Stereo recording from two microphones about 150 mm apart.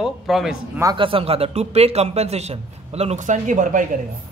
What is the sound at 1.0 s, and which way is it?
A man's voice, 40° right (ahead or behind).